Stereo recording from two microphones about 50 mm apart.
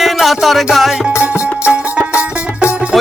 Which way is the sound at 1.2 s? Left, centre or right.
Right.